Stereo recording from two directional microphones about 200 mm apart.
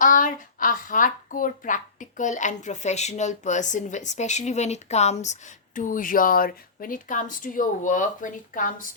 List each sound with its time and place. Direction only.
0.0 s speech: 40° left (ahead or behind)